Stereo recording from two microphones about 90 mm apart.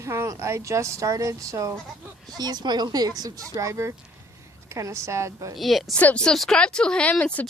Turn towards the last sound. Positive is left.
turn(degrees=15)  # may be behind; listen again after turning